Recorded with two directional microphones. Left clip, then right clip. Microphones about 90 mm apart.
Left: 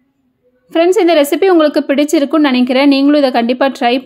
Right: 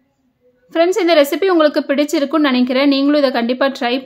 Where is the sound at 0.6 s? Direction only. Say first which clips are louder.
Left 4 dB; 35° left (ahead or behind).